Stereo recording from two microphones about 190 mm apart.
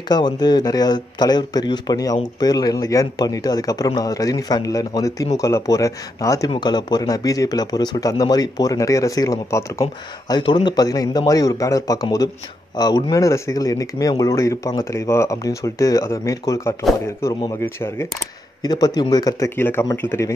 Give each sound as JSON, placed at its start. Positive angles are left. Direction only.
{"t": 0.1, "sound": "a man's voice", "side_deg": 20}